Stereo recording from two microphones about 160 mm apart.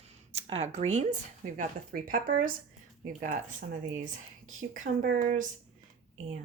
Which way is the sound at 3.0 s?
50° right (ahead or behind).